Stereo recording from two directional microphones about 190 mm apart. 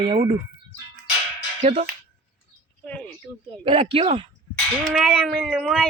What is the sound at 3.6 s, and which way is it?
Speech, 30° right (ahead or behind).